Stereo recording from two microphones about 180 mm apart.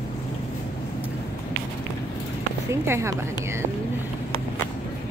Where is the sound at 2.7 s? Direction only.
15° right (ahead or behind).